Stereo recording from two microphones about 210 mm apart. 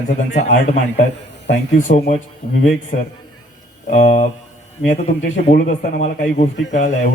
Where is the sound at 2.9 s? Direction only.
45° left (ahead or behind).